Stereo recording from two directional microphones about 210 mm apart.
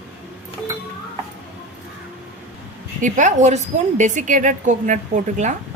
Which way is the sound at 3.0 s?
35° right (ahead or behind).